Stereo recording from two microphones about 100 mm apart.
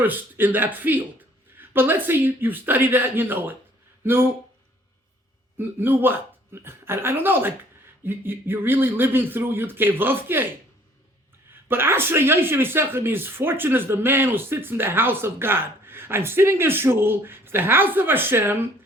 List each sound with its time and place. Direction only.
0.0 s speech: 20° right (ahead or behind)
5.5 s speech: 20° right (ahead or behind)
11.7 s speech: 25° right (ahead or behind)